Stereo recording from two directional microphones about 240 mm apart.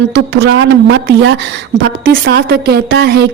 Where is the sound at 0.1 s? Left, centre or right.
Right.